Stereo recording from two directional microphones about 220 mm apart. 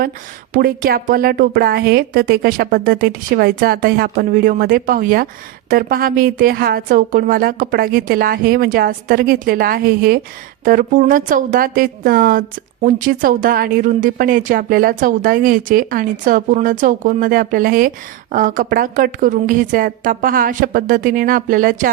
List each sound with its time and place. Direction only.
0.5 s a woman's voice: 40° right (ahead or behind)